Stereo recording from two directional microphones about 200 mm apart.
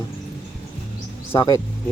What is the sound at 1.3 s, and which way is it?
Speech, 20° left (ahead or behind).